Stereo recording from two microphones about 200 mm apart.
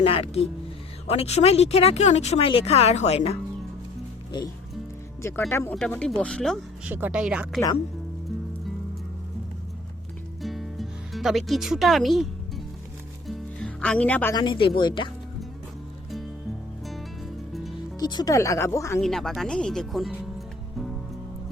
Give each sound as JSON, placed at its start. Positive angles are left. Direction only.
{"t": 0.0, "sound": "speech", "side_deg": 30}
{"t": 5.5, "sound": "speech", "side_deg": 15}
{"t": 10.4, "sound": "music", "side_deg": 0}
{"t": 14.3, "sound": "speech", "side_deg": 25}
{"t": 17.5, "sound": "music", "side_deg": 0}
{"t": 18.0, "sound": "speech", "side_deg": 20}
{"t": 18.9, "sound": "speech", "side_deg": 0}